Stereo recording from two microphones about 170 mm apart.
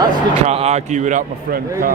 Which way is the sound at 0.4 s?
40° right (ahead or behind).